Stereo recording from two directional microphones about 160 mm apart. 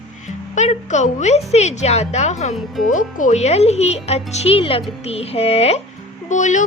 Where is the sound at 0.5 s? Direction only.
45° left (ahead or behind).